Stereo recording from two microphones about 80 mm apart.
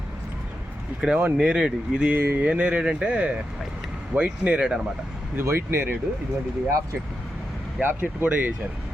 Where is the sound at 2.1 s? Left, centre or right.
Right.